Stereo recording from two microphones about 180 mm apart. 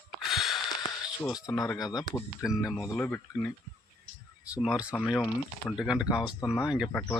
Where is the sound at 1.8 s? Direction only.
20° left (ahead or behind).